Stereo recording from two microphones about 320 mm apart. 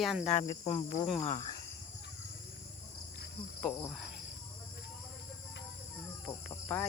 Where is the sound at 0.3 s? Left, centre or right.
Left.